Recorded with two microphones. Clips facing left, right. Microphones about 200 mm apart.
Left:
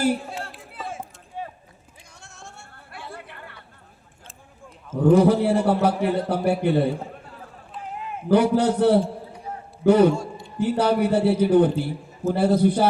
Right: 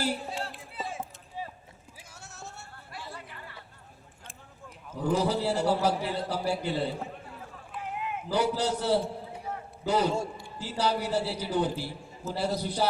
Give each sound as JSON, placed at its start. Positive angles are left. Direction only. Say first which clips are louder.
{"t": 0.0, "sound": "a sound", "louder": "left 8 dB", "side_deg": 50}
{"t": 1.4, "sound": "clip-clop", "louder": "left 5 dB", "side_deg": 60}
{"t": 2.2, "sound": "a sound", "louder": "left 1 dB", "side_deg": -5}
{"t": 2.9, "sound": "chatter", "louder": "left 4 dB", "side_deg": 55}
{"t": 4.9, "sound": "a man's voice", "louder": "left 11 dB", "side_deg": 55}
{"t": 7.7, "sound": "run", "louder": "left 1 dB", "side_deg": 35}
{"t": 8.3, "sound": "a man's voice", "louder": "left 10 dB", "side_deg": 55}